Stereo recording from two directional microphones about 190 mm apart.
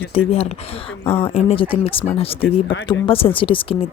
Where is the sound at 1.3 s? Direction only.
30° left (ahead or behind).